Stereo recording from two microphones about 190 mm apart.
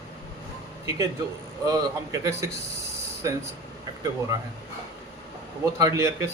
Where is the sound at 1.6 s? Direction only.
20° right (ahead or behind).